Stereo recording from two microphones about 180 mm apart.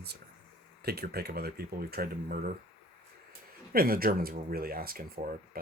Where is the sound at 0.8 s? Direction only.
60° right (ahead or behind).